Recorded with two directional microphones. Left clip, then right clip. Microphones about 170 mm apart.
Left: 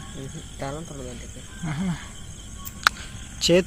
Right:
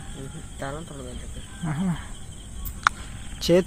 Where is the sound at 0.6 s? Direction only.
45° left (ahead or behind).